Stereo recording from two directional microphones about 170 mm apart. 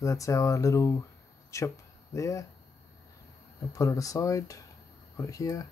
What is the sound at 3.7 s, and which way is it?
Speech, 20° left (ahead or behind).